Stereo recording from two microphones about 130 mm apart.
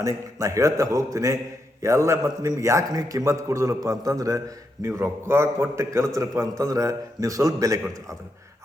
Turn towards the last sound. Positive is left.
turn(degrees=-25)  # may be behind; listen again after turning